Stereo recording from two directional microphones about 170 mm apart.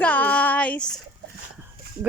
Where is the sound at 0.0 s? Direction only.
10° left (ahead or behind).